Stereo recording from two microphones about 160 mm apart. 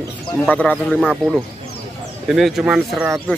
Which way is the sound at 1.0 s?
5° right (ahead or behind).